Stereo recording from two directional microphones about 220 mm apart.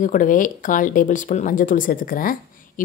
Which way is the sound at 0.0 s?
35° left (ahead or behind).